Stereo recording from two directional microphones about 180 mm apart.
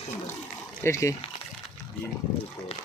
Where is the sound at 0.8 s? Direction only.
15° left (ahead or behind).